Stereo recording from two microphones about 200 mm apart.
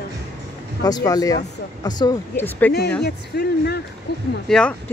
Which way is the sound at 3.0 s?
55° left (ahead or behind).